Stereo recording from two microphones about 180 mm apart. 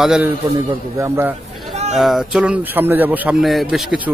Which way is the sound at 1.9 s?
Centre (ahead or behind).